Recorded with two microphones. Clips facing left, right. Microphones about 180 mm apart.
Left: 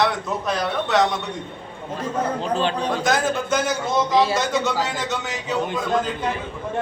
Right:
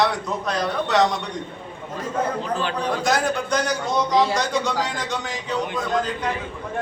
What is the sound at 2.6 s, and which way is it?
Speech, 25° left (ahead or behind).